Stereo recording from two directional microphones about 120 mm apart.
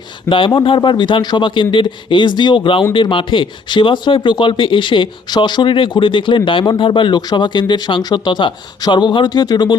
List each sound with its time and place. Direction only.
0.3 s speech: 45° left (ahead or behind)